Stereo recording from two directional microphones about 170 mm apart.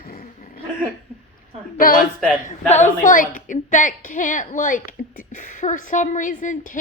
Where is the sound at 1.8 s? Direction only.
55° left (ahead or behind).